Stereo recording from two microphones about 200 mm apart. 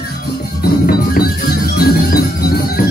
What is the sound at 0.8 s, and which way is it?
Music, 50° left (ahead or behind).